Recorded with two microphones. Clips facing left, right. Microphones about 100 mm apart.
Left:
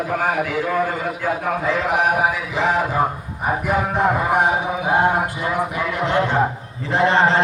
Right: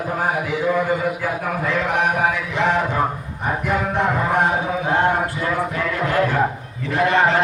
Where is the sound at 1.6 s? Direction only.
Centre (ahead or behind).